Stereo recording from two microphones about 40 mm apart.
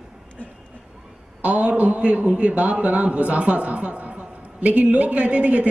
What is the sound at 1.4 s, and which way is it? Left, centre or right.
A man's voice, right.